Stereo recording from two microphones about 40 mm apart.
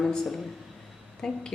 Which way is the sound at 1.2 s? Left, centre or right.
Centre.